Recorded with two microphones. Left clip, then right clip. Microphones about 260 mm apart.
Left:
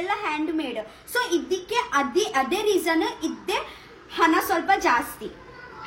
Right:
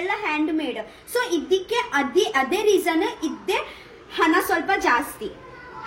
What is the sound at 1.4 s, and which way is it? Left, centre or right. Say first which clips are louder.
A woman's voice: right 3 dB; left.